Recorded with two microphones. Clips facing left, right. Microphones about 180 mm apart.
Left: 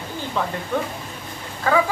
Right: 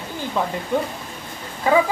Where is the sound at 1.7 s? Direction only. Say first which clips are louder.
Right 2 dB; 15° right (ahead or behind).